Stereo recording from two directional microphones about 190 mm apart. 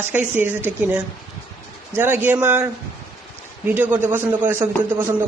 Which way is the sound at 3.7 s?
10° right (ahead or behind).